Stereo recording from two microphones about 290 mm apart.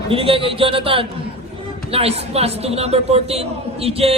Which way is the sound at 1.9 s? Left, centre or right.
Right.